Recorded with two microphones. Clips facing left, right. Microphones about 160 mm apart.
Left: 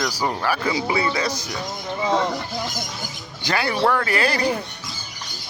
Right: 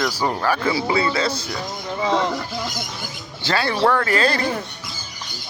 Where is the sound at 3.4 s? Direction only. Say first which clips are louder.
Right 1 dB; 15° left (ahead or behind).